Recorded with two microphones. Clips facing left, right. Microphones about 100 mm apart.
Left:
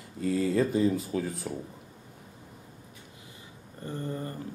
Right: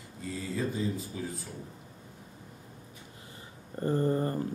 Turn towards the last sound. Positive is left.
turn(degrees=-35)  # may be behind; listen again after turning